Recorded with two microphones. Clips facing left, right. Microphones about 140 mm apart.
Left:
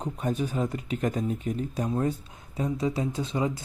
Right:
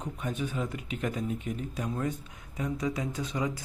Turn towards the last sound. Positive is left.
turn(degrees=30)  # may be behind; listen again after turning